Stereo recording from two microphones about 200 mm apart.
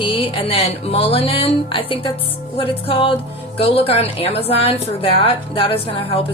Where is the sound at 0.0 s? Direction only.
25° left (ahead or behind).